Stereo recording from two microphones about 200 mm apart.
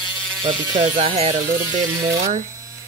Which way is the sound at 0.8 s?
30° right (ahead or behind).